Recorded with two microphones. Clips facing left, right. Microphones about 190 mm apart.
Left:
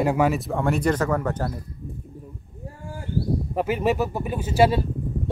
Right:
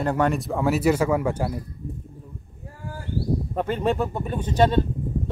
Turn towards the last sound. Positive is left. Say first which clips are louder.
# even
turn(degrees=10)  # may be behind; listen again after turning